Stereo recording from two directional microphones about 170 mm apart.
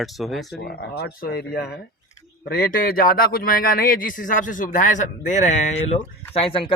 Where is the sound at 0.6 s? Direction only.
70° left (ahead or behind).